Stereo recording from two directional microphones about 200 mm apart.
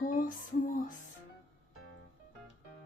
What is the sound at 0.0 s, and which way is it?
Music, 40° left (ahead or behind).